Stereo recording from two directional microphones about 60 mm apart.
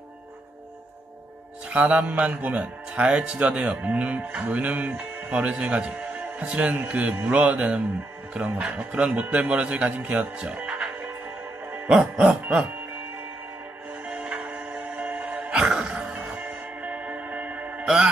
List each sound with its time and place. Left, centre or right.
1.7 s speech: right
11.7 s music: right
14.0 s music: centre
15.5 s music: centre
16.2 s music: right
17.8 s music: centre